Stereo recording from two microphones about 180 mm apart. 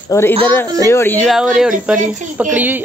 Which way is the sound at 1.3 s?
5° right (ahead or behind).